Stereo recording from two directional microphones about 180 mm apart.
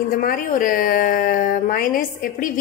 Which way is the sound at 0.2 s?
50° left (ahead or behind).